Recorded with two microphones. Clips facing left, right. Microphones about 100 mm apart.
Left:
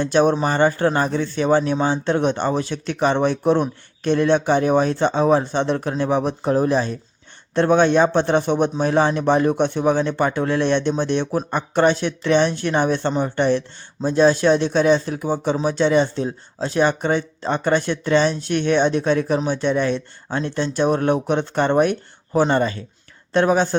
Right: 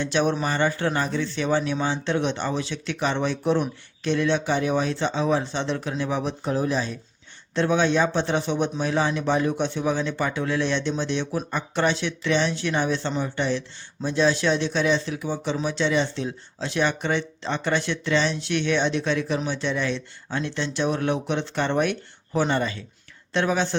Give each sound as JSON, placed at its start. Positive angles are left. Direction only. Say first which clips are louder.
{"t": 0.0, "sound": "speech", "louder": "left 6 dB", "side_deg": 45}